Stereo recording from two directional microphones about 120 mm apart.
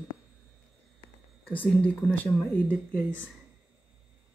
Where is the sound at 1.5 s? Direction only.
15° left (ahead or behind).